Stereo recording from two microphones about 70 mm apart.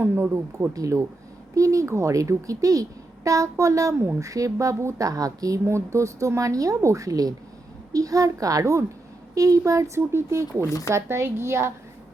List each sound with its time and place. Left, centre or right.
0.0 s a woman's voice: right
0.7 s a woman's voice: right
3.9 s a woman's voice: right
4.2 s a woman's voice: right
5.6 s a woman's voice: right
10.7 s speech: left
10.9 s a woman's voice: right